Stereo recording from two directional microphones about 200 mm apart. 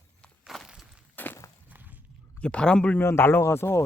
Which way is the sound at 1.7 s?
10° right (ahead or behind).